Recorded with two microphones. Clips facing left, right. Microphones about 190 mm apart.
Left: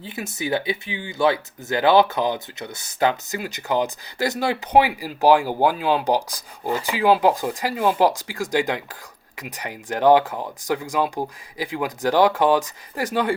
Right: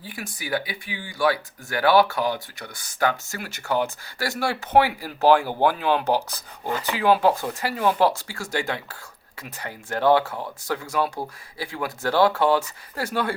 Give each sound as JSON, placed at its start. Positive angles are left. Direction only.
{"t": 0.0, "sound": "speech", "side_deg": 25}